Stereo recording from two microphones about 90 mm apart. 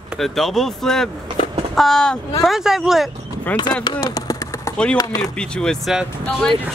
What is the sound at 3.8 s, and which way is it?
Speech, 45° left (ahead or behind).